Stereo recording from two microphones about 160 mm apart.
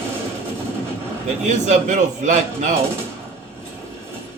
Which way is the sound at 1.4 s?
50° right (ahead or behind).